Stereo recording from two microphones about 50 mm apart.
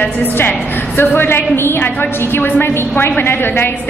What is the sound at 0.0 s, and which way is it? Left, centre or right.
A woman's voice, left.